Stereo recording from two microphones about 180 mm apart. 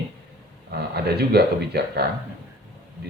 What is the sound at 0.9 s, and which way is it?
Speech, 65° right (ahead or behind).